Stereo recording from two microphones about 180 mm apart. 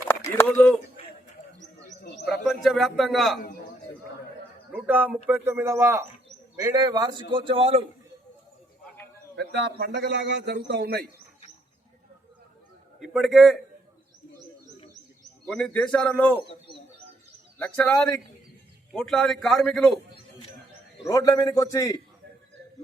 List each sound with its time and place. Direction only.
0.1 s speech: 15° left (ahead or behind)
2.0 s bird: 65° left (ahead or behind)
2.3 s a man's voice: centre (ahead or behind)
4.7 s a man's voice: 10° right (ahead or behind); by 7.9 s 30° right (ahead or behind)
9.3 s a man's voice: 70° right (ahead or behind)
13.0 s a man's voice: centre (ahead or behind)
15.4 s a man's voice: 5° left (ahead or behind)
17.6 s a man's voice: 5° left (ahead or behind)
21.0 s a man's voice: 20° left (ahead or behind)